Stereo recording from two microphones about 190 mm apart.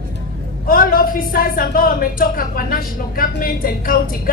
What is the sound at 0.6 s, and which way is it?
Speech, 50° left (ahead or behind).